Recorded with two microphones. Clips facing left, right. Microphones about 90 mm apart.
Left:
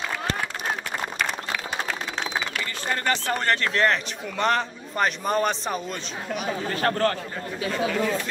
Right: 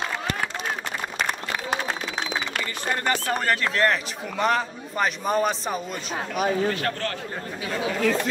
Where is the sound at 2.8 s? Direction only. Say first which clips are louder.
Even; 15° right (ahead or behind).